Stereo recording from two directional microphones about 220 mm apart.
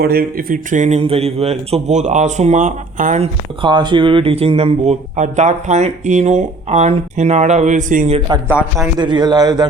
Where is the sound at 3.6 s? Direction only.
20° right (ahead or behind).